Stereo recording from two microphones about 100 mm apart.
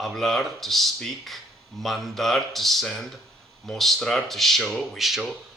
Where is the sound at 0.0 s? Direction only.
Centre (ahead or behind).